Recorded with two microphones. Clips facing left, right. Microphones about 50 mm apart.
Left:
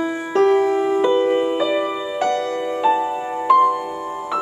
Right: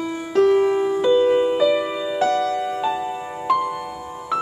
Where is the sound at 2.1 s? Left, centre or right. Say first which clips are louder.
Right 2 dB; left.